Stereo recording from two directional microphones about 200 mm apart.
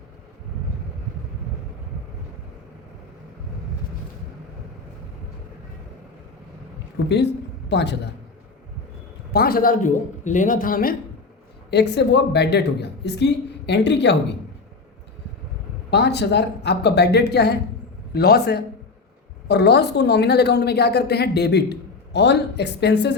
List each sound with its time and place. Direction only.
7.0 s a woman's voice: 60° left (ahead or behind)
9.3 s a man's voice: 50° left (ahead or behind)
11.7 s a woman's voice: 55° left (ahead or behind)
15.9 s a woman's voice: 55° left (ahead or behind)